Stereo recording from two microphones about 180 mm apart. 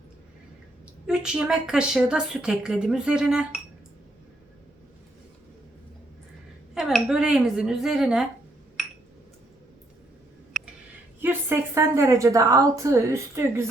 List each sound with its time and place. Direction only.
1.0 s a woman's voice: 5° right (ahead or behind)
6.7 s a woman's voice: 5° right (ahead or behind)
11.2 s a woman's voice: 10° right (ahead or behind)